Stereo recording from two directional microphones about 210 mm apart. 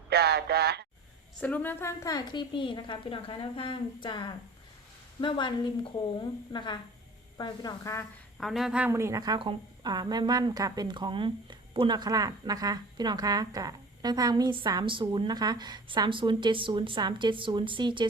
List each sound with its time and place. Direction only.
0.1 s speech: 50° right (ahead or behind)
1.4 s a woman's voice: 5° left (ahead or behind)
8.4 s a woman's voice: centre (ahead or behind); by 18.0 s 25° right (ahead or behind)